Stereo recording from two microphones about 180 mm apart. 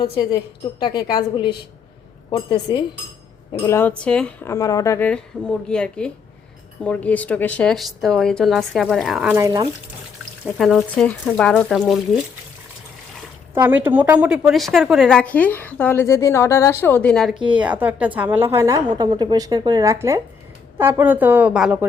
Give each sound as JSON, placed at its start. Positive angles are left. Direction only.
{"t": 0.0, "sound": "a woman's voice", "side_deg": 30}
{"t": 3.7, "sound": "speech", "side_deg": 10}
{"t": 10.4, "sound": "speech", "side_deg": 0}
{"t": 13.5, "sound": "speech", "side_deg": -10}
{"t": 17.5, "sound": "a woman's voice", "side_deg": -5}